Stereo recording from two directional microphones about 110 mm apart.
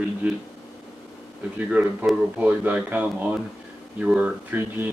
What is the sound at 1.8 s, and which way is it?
Speech, 15° right (ahead or behind).